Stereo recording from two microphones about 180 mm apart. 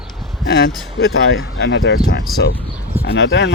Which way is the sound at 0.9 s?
75° left (ahead or behind).